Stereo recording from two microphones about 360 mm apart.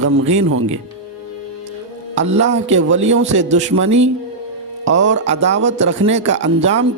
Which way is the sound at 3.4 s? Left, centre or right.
Centre.